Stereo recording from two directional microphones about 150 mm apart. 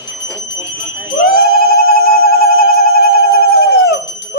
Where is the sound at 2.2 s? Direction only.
80° left.